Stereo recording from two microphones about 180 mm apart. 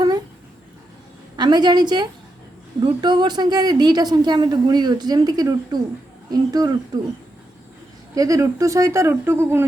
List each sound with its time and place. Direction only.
1.4 s a woman's voice: 25° right (ahead or behind)
8.1 s speech: 20° right (ahead or behind)